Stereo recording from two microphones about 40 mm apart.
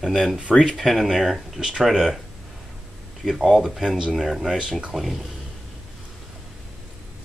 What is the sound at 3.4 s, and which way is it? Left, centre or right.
Speech, centre.